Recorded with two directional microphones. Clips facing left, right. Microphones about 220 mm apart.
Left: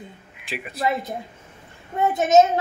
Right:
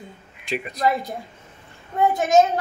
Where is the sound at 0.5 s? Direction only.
5° left (ahead or behind).